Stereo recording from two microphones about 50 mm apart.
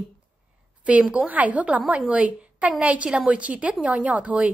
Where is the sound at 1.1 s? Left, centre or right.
Right.